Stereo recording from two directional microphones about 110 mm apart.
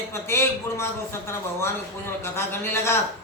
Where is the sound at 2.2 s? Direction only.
20° left (ahead or behind).